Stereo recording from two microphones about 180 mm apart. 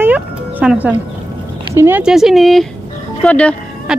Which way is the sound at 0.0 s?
10° right (ahead or behind).